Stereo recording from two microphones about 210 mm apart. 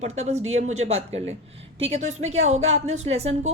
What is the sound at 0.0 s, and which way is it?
A woman's voice, 30° right (ahead or behind).